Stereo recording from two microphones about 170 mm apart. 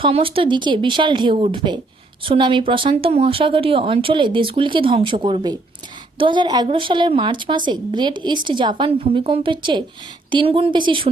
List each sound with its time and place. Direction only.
0.0 s a woman's voice: 30° right (ahead or behind)